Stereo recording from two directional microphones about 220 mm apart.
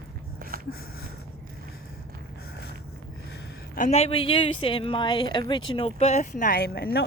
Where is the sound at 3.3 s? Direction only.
40° left (ahead or behind).